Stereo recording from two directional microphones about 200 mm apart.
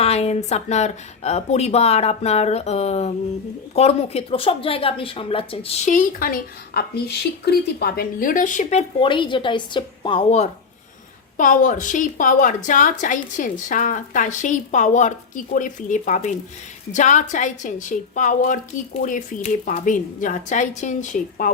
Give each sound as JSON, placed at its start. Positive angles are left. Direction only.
{"t": 0.0, "sound": "speech", "side_deg": 30}
{"t": 9.0, "sound": "a woman's voice", "side_deg": 25}